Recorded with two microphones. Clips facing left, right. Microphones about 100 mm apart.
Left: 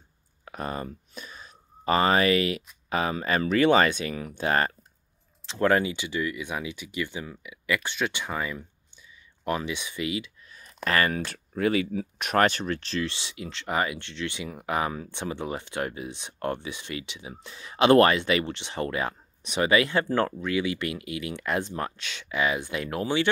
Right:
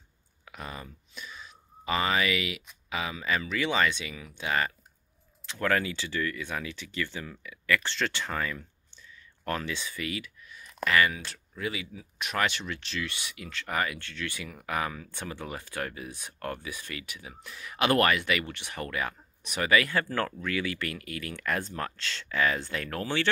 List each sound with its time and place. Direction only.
0.5 s speech: 40° left (ahead or behind)
5.5 s speech: 25° left (ahead or behind)
10.5 s speech: 35° left (ahead or behind); by 12.4 s 55° left (ahead or behind)
12.4 s speech: 45° left (ahead or behind); by 23.2 s 15° left (ahead or behind)